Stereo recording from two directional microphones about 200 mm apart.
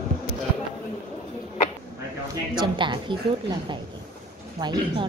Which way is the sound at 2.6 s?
25° right (ahead or behind).